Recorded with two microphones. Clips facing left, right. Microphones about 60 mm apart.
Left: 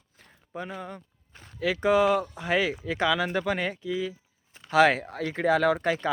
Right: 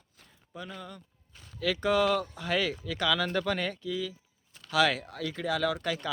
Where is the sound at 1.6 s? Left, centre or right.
Left.